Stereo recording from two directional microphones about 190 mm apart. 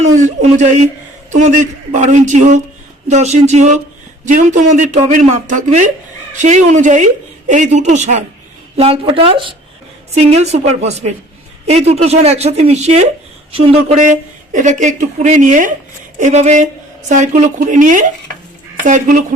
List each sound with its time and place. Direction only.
0.0 s speech: 40° right (ahead or behind)